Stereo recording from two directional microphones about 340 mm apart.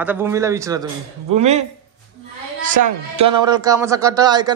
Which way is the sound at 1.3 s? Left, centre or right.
Centre.